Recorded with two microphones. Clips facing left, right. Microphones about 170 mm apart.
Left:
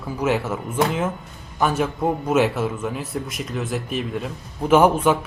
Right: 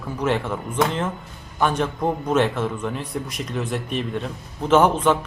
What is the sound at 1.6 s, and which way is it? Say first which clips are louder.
A man's voice: left 1 dB; 5° left (ahead or behind).